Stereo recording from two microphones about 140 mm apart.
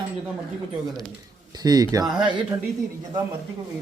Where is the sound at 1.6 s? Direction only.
30° right (ahead or behind).